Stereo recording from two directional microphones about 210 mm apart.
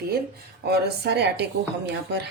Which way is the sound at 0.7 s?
55° right (ahead or behind).